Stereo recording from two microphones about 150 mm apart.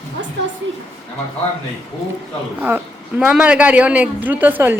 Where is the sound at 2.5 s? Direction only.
10° right (ahead or behind).